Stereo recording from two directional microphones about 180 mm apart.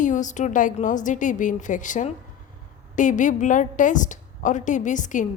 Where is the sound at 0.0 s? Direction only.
45° left (ahead or behind).